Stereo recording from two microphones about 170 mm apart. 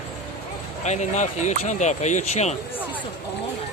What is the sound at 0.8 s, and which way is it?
Speech, 45° left (ahead or behind).